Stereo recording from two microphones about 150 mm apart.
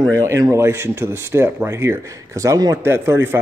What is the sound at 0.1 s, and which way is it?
Speech, 20° right (ahead or behind).